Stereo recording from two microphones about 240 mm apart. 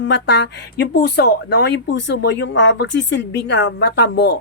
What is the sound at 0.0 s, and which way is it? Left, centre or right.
A woman's voice, left.